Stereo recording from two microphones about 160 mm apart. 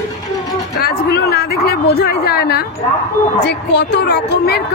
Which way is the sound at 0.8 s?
80° left.